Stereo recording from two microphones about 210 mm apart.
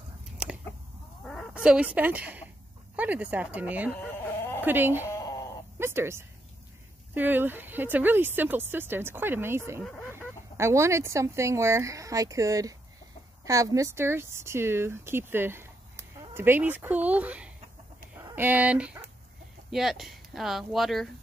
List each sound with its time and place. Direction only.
1.2 s speech: 5° left (ahead or behind)
4.0 s chicken: 10° left (ahead or behind)
4.6 s speech: 10° right (ahead or behind)
5.0 s a sound: 15° left (ahead or behind)
5.8 s speech: 10° right (ahead or behind)
9.8 s speech: 5° left (ahead or behind)
10.1 s speech: 15° right (ahead or behind)